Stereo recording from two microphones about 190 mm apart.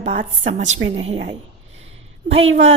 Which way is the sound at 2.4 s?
35° right (ahead or behind).